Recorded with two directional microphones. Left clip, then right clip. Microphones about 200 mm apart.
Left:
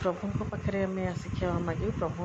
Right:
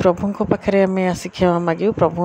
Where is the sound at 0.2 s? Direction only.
55° right (ahead or behind).